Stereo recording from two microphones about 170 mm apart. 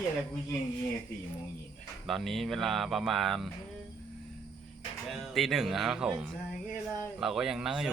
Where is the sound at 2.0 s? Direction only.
Centre (ahead or behind).